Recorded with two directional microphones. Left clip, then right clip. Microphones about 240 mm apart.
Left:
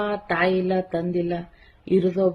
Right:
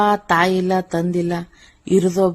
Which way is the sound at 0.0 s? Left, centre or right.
Right.